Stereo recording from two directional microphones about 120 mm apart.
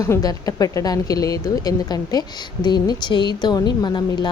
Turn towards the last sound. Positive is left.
turn(degrees=40)  # may be behind; listen again after turning